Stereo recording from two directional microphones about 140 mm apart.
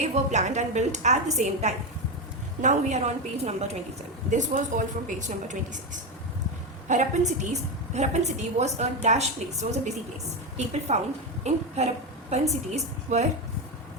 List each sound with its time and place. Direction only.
0.0 s a woman's voice: 55° right (ahead or behind)
4.3 s a woman's voice: 60° right (ahead or behind)